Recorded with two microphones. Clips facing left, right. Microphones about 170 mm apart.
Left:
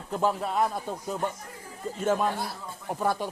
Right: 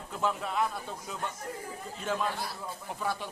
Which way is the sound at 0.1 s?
40° left (ahead or behind).